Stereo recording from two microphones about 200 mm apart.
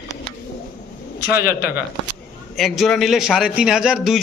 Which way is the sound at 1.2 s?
50° left (ahead or behind).